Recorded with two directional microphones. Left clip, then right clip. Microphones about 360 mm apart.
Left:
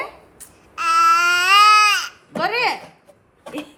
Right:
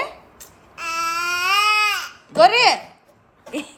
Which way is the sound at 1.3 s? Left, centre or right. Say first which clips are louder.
Left 3 dB; centre.